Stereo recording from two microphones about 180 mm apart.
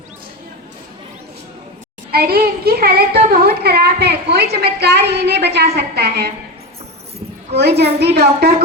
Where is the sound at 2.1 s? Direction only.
60° right (ahead or behind).